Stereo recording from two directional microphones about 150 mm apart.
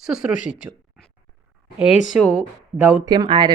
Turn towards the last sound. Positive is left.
turn(degrees=-30)  # may be behind; listen again after turning